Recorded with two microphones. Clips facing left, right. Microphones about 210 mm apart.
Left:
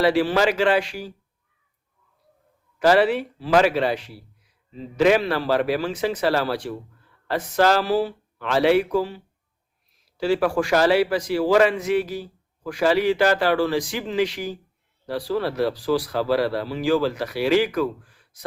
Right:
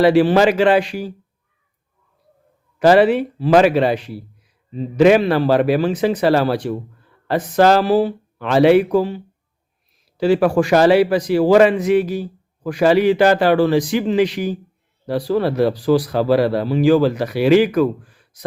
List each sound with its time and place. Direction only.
0.0 s a man's voice: 20° right (ahead or behind)
2.7 s a man's voice: 20° right (ahead or behind)